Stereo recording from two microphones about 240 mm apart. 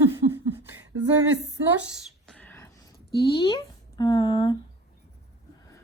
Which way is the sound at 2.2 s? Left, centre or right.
Centre.